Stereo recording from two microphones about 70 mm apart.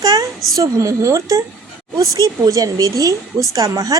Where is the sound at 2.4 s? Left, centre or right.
Right.